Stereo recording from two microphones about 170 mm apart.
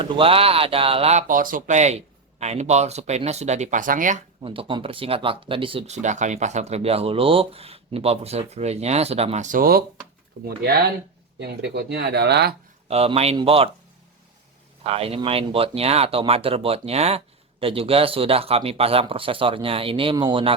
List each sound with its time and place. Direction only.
0.0 s speech: 35° right (ahead or behind)
1.3 s speech: 55° right (ahead or behind)
4.4 s speech: 30° right (ahead or behind); by 10.9 s 65° right (ahead or behind)
11.3 s speech: 75° right (ahead or behind)
12.9 s speech: 35° right (ahead or behind)
14.8 s speech: 35° right (ahead or behind)